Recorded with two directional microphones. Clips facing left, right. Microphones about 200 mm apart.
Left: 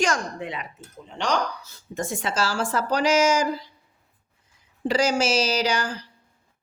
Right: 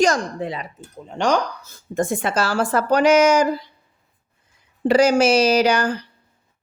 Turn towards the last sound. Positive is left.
turn(degrees=-60)  # may be behind; listen again after turning